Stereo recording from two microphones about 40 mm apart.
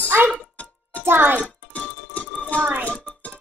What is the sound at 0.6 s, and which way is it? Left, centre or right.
Music, left.